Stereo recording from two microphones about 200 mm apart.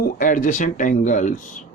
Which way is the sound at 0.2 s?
40° left (ahead or behind).